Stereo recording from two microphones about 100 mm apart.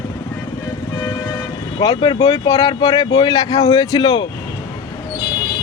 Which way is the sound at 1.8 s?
35° left (ahead or behind).